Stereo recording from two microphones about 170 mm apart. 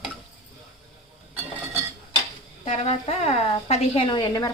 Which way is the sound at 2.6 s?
40° left (ahead or behind).